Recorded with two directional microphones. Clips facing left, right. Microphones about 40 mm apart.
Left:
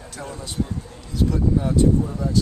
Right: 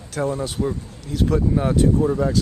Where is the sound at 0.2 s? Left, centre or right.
Right.